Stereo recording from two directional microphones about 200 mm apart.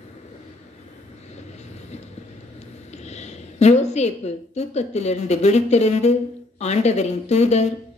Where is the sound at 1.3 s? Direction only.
35° left (ahead or behind).